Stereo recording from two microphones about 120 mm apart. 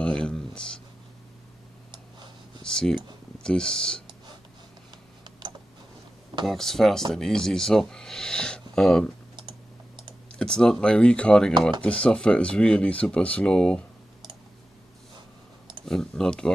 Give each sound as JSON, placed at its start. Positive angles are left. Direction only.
{"t": 0.0, "sound": "a sound", "side_deg": 10}
{"t": 2.6, "sound": "computer keyboard", "side_deg": 5}
{"t": 3.4, "sound": "speech", "side_deg": 5}
{"t": 5.4, "sound": "tick", "side_deg": -40}
{"t": 6.4, "sound": "speech", "side_deg": 0}
{"t": 10.4, "sound": "speech", "side_deg": 5}
{"t": 15.8, "sound": "speech", "side_deg": 5}